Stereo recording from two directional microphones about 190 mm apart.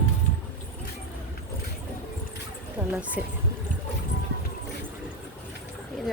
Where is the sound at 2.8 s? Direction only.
10° right (ahead or behind).